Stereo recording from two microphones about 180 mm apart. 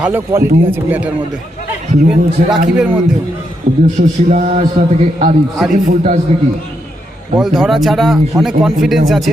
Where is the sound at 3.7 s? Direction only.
35° right (ahead or behind).